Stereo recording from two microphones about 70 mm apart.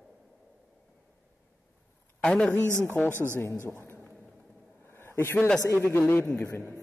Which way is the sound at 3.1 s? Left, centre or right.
Right.